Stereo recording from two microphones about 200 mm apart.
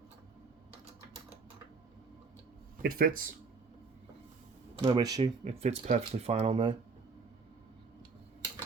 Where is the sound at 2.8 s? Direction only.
45° right (ahead or behind).